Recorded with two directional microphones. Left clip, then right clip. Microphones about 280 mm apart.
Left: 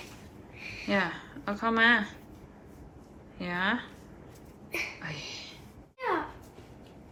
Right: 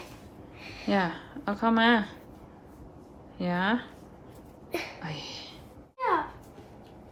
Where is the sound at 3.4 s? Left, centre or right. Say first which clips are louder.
Right 2 dB; centre.